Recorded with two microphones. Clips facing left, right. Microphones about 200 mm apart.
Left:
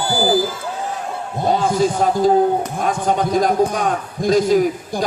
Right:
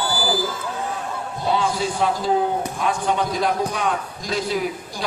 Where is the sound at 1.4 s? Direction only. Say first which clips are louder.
Left 5 dB; 45° left (ahead or behind).